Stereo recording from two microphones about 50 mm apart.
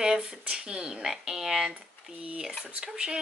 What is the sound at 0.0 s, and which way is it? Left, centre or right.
A woman's voice, centre.